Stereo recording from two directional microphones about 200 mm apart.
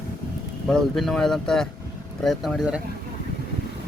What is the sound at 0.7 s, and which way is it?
Speech, centre (ahead or behind).